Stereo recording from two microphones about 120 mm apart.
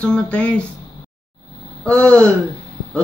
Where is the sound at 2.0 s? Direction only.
10° left (ahead or behind).